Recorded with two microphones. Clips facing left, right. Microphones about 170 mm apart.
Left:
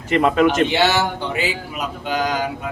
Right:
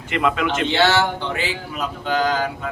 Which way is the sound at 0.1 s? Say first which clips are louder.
Left 5 dB; 40° left (ahead or behind).